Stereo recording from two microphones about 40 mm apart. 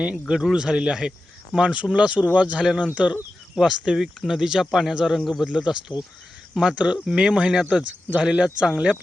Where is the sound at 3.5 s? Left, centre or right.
Centre.